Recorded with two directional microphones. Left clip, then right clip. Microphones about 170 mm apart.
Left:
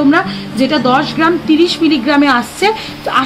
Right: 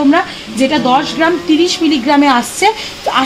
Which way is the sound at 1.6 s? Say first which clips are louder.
Even; 30° right (ahead or behind).